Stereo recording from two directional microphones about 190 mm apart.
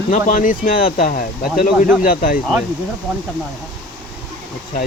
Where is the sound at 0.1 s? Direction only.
40° left (ahead or behind).